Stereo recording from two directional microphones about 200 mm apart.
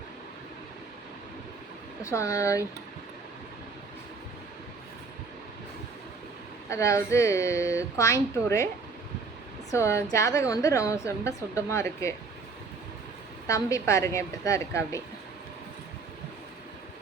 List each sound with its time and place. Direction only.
2.0 s a woman's voice: 15° left (ahead or behind)
6.7 s a woman's voice: 15° left (ahead or behind)
9.7 s a woman's voice: 15° left (ahead or behind)
13.5 s a woman's voice: 15° left (ahead or behind)